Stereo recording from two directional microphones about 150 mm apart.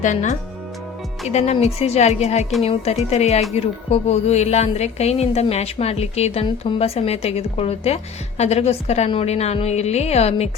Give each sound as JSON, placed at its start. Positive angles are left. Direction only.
{"t": 0.0, "sound": "a woman's voice", "side_deg": 55}